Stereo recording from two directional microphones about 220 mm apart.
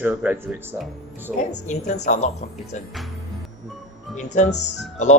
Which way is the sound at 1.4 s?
35° left (ahead or behind).